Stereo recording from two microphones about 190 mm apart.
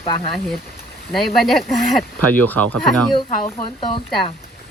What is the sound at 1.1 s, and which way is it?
Speech, centre (ahead or behind).